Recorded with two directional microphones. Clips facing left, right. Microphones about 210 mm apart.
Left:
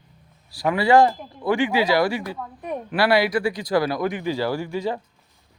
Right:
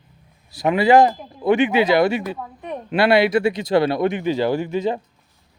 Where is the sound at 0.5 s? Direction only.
20° right (ahead or behind).